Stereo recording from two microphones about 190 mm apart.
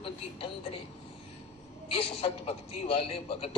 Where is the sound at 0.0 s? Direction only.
30° left (ahead or behind).